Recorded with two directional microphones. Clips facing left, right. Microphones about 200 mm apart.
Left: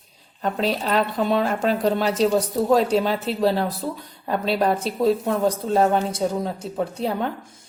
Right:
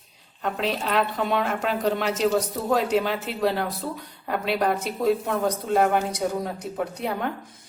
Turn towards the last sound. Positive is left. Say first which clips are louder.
# left 3 dB
turn(degrees=30)  # may be behind; listen again after turning